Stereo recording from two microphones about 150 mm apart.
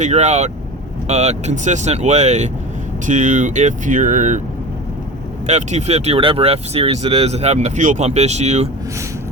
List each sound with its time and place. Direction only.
0.0 s speech: 50° right (ahead or behind)
5.5 s speech: 50° right (ahead or behind)